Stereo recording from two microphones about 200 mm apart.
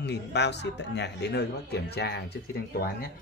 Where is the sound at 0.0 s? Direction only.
60° left (ahead or behind).